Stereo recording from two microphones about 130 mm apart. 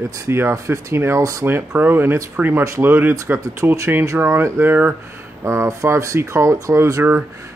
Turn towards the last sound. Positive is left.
turn(degrees=-15)  # may be behind; listen again after turning